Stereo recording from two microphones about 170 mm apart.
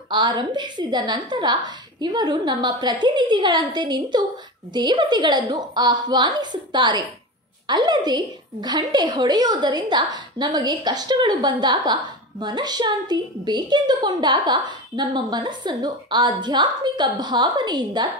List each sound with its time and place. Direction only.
0.1 s a woman's voice: 25° right (ahead or behind)